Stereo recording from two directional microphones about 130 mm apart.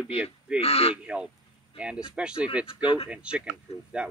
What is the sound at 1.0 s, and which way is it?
Speech, 10° right (ahead or behind).